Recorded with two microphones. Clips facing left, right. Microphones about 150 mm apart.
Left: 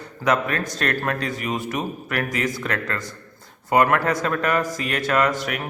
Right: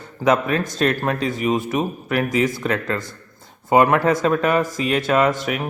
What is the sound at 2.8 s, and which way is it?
A man's voice, 25° right (ahead or behind).